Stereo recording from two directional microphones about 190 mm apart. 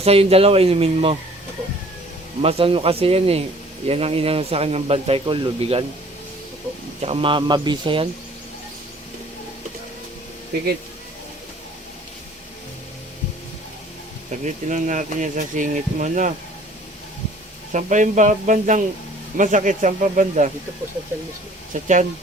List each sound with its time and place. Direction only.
0.0 s speech: 30° right (ahead or behind)
2.4 s speech: 30° right (ahead or behind)
7.0 s a man's voice: 30° right (ahead or behind)
14.3 s speech: 40° right (ahead or behind)
17.7 s speech: 40° right (ahead or behind)
21.7 s speech: 40° right (ahead or behind)